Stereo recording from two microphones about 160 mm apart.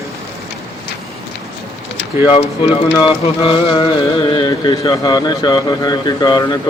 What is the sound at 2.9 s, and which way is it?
Speech, 25° left (ahead or behind).